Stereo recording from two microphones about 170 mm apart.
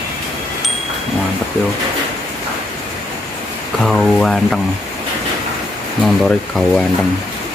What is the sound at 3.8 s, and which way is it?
Speech, 5° left (ahead or behind).